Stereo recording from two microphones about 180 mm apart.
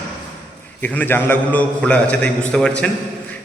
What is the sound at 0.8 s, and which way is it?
A man's voice, 10° left (ahead or behind).